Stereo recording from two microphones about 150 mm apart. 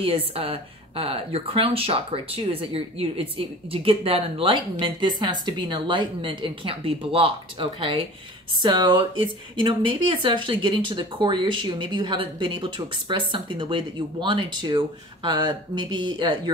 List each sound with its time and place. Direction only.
0.0 s speech: 40° right (ahead or behind)